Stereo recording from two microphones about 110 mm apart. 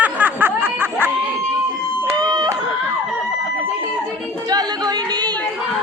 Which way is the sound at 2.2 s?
40° right (ahead or behind).